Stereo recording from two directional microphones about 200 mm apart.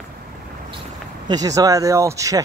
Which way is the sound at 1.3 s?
20° right (ahead or behind).